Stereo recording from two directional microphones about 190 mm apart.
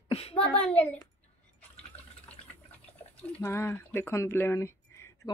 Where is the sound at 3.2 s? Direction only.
10° left (ahead or behind).